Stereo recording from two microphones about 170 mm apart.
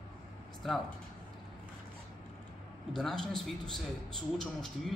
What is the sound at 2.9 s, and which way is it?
A man's voice, centre (ahead or behind).